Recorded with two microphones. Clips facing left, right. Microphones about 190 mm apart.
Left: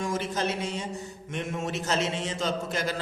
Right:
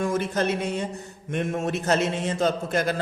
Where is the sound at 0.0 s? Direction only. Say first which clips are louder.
Right 5 dB; 55° right (ahead or behind).